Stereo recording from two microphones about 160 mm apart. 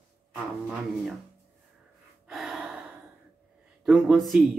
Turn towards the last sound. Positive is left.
turn(degrees=0)  # may be behind; listen again after turning